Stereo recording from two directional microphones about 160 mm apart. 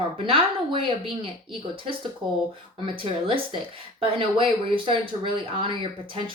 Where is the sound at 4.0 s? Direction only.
35° right (ahead or behind).